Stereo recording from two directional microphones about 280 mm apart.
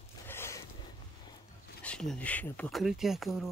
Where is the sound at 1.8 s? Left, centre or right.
Centre.